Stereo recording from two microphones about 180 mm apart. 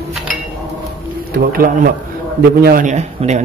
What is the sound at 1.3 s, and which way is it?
A man's voice, 55° right (ahead or behind).